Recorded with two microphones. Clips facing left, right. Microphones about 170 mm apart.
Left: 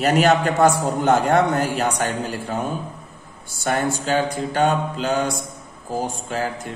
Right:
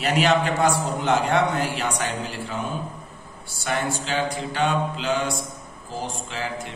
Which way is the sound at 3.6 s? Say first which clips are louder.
Left 4 dB; 45° left (ahead or behind).